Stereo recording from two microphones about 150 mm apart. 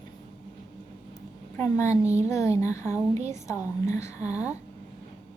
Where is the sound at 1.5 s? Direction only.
15° left (ahead or behind).